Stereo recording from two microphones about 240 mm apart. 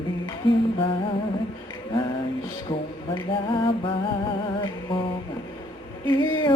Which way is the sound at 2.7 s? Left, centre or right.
Left.